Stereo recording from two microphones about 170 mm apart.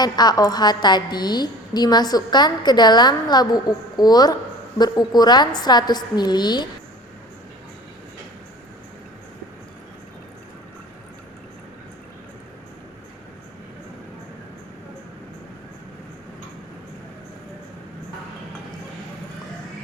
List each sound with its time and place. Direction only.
0.0 s a woman's voice: 25° left (ahead or behind)